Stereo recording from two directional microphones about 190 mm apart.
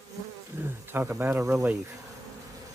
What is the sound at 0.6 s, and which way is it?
Speech, 10° right (ahead or behind).